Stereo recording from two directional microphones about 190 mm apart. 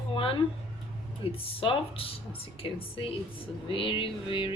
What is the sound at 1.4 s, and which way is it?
Speech, 30° left (ahead or behind).